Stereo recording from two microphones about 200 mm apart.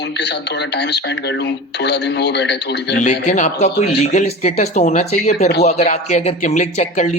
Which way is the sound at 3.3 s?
40° left (ahead or behind).